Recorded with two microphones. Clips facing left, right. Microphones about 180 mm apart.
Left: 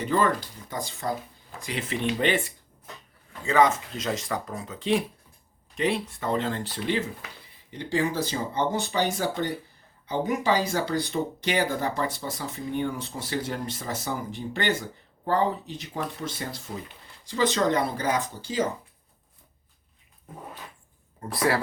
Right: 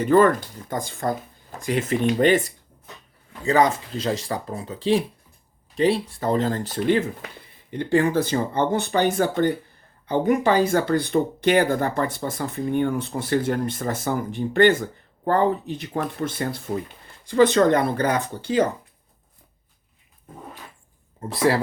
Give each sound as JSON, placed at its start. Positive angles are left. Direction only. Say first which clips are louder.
{"t": 0.0, "sound": "speech", "louder": "right 8 dB", "side_deg": -50}
{"t": 21.2, "sound": "speech", "louder": "right 4 dB", "side_deg": -25}